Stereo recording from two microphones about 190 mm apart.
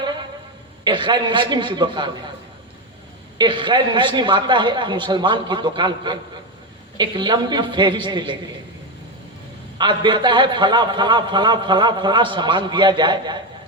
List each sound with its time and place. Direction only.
0.0 s a sound: 25° right (ahead or behind)
0.9 s a man's voice: 25° right (ahead or behind)
3.3 s a man's voice: 25° right (ahead or behind)
9.7 s a man's voice: 25° right (ahead or behind)